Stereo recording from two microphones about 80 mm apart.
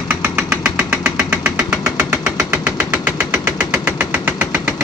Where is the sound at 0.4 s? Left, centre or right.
Centre.